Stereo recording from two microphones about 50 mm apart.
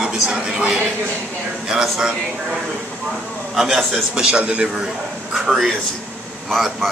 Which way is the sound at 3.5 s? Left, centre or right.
Centre.